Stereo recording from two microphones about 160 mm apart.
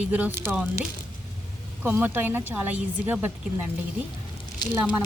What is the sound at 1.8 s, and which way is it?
Speech, 10° right (ahead or behind).